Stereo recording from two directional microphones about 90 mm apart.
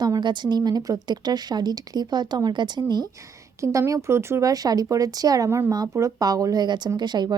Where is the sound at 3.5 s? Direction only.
35° right (ahead or behind).